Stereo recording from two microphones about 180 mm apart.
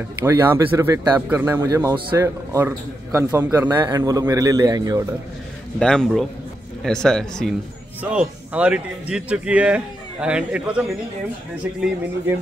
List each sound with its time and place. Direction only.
0.2 s a man's voice: 15° right (ahead or behind)
5.8 s a man's voice: 5° left (ahead or behind)